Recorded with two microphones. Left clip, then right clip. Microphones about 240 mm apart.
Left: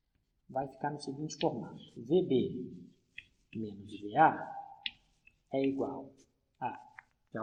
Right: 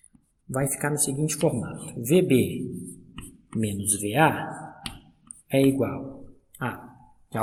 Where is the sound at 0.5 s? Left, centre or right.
Right.